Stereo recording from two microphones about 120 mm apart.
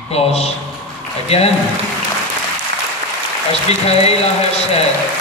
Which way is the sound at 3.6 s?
60° left (ahead or behind).